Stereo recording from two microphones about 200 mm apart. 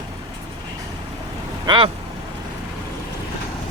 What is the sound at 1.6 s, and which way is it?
Speech, 20° right (ahead or behind).